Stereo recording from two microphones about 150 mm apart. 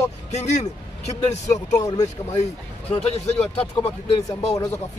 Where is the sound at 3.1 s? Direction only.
45° left (ahead or behind).